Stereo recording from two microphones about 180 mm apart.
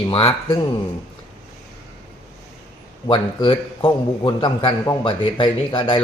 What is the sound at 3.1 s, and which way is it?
A man's voice, 30° left (ahead or behind).